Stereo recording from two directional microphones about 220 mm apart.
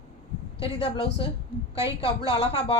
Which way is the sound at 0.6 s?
25° left (ahead or behind).